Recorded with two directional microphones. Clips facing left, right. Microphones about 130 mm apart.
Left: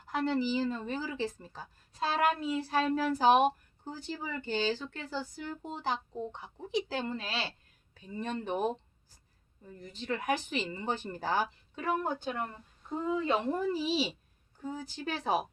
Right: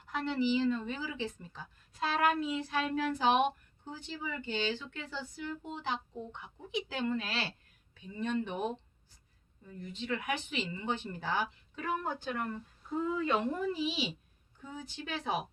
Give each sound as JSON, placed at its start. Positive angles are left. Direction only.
{"t": 0.0, "sound": "speech", "side_deg": 40}
{"t": 11.8, "sound": "speech", "side_deg": 30}